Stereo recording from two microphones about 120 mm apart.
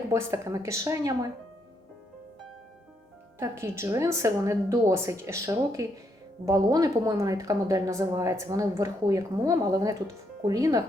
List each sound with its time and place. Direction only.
0.1 s speech: 25° right (ahead or behind)
3.3 s speech: 25° right (ahead or behind)